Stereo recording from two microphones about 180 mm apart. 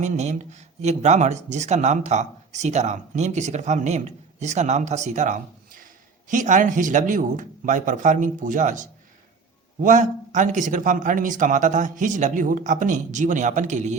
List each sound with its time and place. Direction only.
0.0 s a man's voice: 40° right (ahead or behind)